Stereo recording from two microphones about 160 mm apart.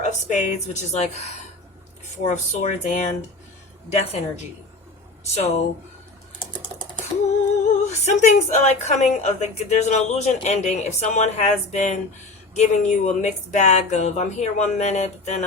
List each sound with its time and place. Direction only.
0.0 s a woman's voice: 50° left (ahead or behind)
5.3 s speech: 45° left (ahead or behind)
6.4 s typing: 30° left (ahead or behind)
7.8 s speech: 45° left (ahead or behind)